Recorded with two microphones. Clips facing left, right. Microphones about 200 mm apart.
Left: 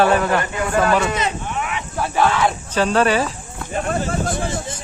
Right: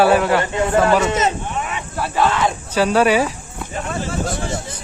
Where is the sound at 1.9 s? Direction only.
10° left (ahead or behind).